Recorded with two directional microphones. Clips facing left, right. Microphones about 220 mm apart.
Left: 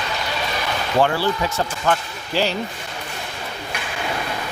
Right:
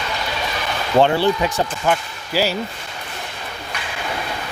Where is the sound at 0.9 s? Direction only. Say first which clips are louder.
Right 4 dB; 25° right (ahead or behind); by 2.6 s 5° right (ahead or behind).